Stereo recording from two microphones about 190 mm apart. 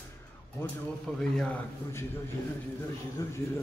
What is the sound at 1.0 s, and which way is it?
Speech, 5° left (ahead or behind).